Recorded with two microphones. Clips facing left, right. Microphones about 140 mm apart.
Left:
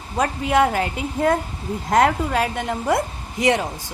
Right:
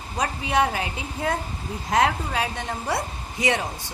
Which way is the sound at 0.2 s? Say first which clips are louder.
Left 5 dB; 55° left (ahead or behind).